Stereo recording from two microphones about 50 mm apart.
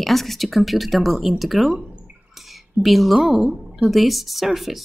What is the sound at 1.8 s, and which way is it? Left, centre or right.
Bathtub, right.